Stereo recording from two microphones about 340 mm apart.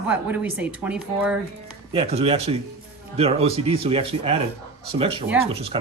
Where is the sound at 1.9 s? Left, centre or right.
Centre.